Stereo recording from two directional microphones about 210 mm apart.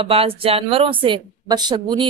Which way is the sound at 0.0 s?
25° right (ahead or behind).